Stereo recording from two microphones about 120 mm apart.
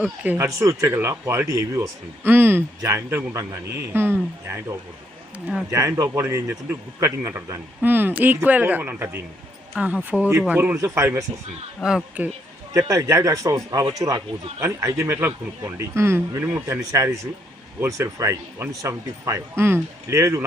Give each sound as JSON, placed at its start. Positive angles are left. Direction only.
{"t": 0.0, "sound": "a man's voice", "side_deg": -15}
{"t": 0.4, "sound": "speech", "side_deg": -25}
{"t": 2.2, "sound": "speech", "side_deg": -15}
{"t": 5.7, "sound": "a man's voice", "side_deg": -25}
{"t": 11.8, "sound": "speech", "side_deg": -5}
{"t": 12.7, "sound": "speech", "side_deg": -25}